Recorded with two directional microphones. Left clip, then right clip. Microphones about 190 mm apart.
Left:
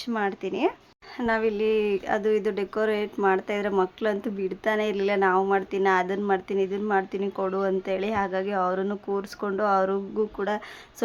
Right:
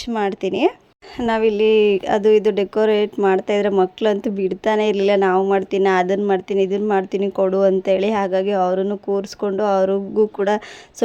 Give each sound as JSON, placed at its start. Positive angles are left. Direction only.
{"t": 0.0, "sound": "speech", "side_deg": -35}